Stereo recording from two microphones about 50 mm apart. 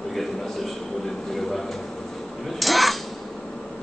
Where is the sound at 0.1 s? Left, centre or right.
Centre.